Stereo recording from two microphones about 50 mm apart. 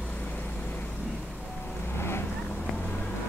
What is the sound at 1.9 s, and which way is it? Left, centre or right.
Vehicle, left.